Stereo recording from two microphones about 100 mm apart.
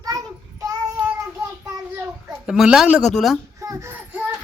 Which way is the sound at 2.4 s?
5° right (ahead or behind).